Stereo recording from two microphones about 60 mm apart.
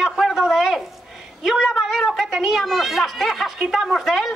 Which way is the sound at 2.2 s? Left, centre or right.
Centre.